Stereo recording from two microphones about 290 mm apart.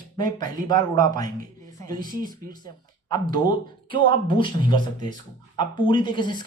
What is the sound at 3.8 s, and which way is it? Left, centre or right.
Speech, centre.